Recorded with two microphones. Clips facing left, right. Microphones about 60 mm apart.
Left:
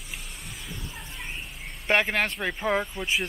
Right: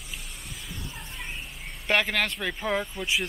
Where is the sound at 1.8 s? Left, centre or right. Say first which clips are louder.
Left 1 dB; left.